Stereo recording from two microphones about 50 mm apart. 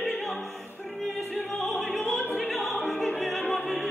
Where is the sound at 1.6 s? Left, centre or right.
Centre.